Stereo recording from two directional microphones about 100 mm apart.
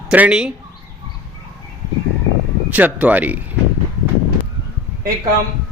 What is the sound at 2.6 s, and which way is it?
Speech, 15° right (ahead or behind).